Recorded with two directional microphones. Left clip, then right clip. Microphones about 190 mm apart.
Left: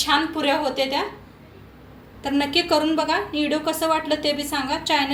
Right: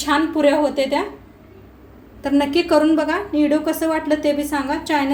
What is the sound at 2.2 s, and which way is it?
A woman's voice, 45° right (ahead or behind).